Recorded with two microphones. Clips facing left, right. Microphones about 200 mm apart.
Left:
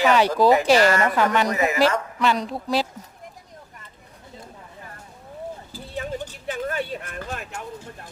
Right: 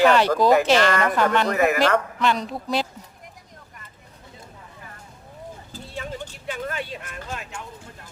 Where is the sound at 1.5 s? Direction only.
60° right (ahead or behind).